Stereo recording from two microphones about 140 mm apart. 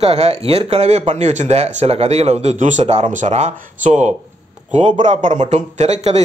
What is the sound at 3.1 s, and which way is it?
Speech, 60° right (ahead or behind).